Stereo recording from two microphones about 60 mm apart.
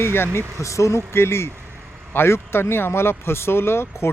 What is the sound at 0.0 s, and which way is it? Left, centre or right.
Speech, left.